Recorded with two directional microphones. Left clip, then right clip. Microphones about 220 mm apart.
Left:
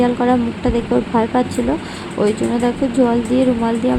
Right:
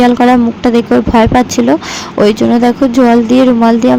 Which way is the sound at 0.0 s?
25° right (ahead or behind).